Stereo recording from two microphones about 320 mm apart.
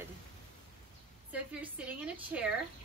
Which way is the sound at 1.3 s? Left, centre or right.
Centre.